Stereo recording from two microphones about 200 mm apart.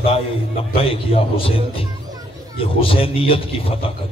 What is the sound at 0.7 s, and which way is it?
Speech, 30° left (ahead or behind).